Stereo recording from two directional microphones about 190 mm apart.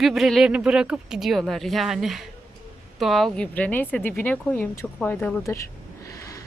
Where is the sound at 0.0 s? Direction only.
Centre (ahead or behind).